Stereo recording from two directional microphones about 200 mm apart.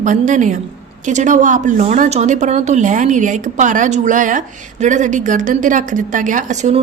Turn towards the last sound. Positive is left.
turn(degrees=-35)  # may be behind; listen again after turning